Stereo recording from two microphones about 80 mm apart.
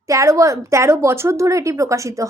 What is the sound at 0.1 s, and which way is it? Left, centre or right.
A woman's voice, right.